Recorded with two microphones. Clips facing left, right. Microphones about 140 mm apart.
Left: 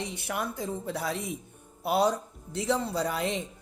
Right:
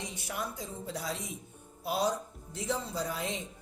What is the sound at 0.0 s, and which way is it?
Speech, 65° left (ahead or behind).